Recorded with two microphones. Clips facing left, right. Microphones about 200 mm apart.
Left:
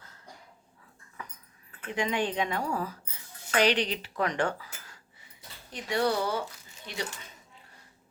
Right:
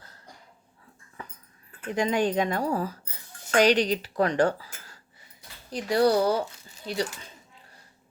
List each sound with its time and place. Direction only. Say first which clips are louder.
1.2 s dog: right 2 dB; 30° right (ahead or behind)
2.0 s speech: right 5 dB; 40° right (ahead or behind)